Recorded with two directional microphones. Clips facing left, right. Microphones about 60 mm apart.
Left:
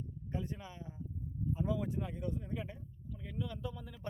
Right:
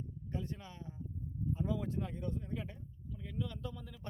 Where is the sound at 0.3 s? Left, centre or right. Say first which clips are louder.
Left 1 dB; centre.